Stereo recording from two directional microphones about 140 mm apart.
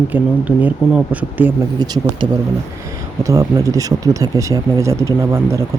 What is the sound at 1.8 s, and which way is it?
Speech, 30° right (ahead or behind).